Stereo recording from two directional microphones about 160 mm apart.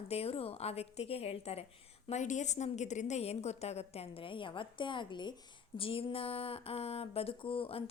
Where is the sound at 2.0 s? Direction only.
45° left (ahead or behind).